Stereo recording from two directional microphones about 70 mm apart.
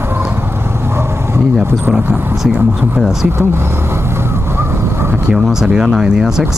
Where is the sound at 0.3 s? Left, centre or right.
Right.